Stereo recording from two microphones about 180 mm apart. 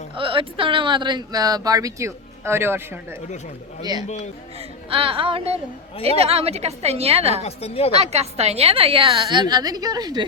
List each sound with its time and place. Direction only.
0.2 s speech: 30° right (ahead or behind); by 3.2 s 15° right (ahead or behind)
4.9 s a woman's voice: 30° right (ahead or behind)
7.4 s a woman's voice: 35° left (ahead or behind)
7.9 s speech: 35° right (ahead or behind)